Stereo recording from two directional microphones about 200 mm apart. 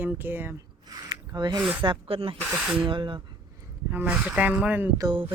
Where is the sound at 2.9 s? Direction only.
25° right (ahead or behind).